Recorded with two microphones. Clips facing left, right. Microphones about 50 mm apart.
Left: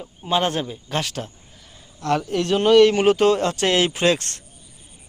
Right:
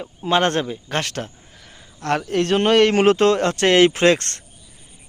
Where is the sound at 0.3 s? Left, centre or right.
Right.